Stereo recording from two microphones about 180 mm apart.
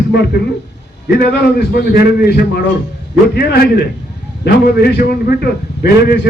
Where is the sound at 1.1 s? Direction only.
60° left (ahead or behind).